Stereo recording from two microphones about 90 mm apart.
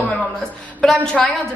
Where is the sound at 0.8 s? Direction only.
5° left (ahead or behind).